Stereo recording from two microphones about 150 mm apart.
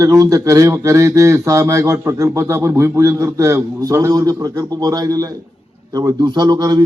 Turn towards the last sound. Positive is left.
turn(degrees=-25)  # may be behind; listen again after turning